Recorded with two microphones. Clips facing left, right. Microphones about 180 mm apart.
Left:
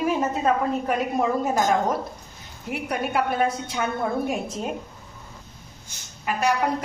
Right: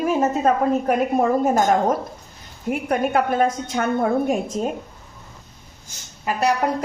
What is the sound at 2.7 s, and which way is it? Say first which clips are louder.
A woman's voice: right 6 dB; 45° right (ahead or behind).